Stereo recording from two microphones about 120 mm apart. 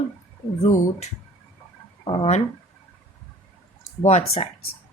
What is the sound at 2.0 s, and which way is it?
Speech, 45° left (ahead or behind).